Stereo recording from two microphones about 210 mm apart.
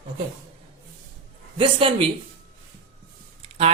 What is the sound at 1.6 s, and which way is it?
Speech, 25° right (ahead or behind).